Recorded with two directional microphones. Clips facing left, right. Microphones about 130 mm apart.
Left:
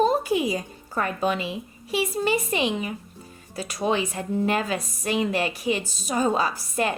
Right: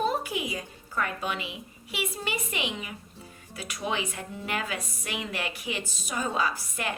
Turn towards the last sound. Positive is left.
turn(degrees=35)  # may be behind; listen again after turning